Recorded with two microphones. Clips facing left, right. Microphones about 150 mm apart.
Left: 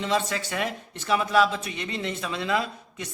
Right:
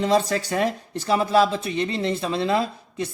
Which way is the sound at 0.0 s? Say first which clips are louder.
Right 6 dB; 40° right (ahead or behind).